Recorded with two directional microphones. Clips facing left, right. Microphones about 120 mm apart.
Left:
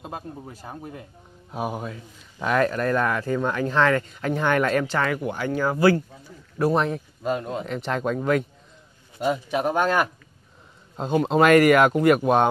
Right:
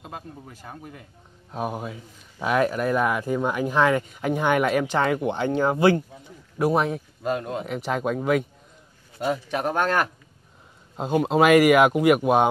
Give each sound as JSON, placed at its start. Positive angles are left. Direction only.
{"t": 0.0, "sound": "speech", "side_deg": 35}
{"t": 1.5, "sound": "speech", "side_deg": 5}
{"t": 6.6, "sound": "speech", "side_deg": -5}
{"t": 9.2, "sound": "speech", "side_deg": 5}
{"t": 11.0, "sound": "speech", "side_deg": -5}